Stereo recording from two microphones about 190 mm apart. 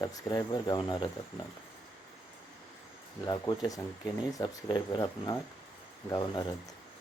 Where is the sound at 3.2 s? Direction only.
20° left (ahead or behind).